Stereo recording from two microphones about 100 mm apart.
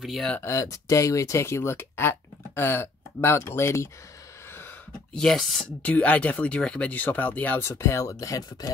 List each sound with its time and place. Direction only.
0.0 s speech: centre (ahead or behind)
0.4 s speech: 30° left (ahead or behind)
5.1 s speech: 5° left (ahead or behind)
5.8 s speech: 15° left (ahead or behind); by 8.7 s 40° left (ahead or behind)